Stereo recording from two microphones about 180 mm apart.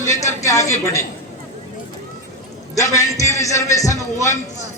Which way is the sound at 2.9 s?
15° left (ahead or behind).